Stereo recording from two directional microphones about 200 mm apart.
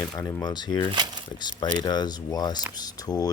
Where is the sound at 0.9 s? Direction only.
20° right (ahead or behind).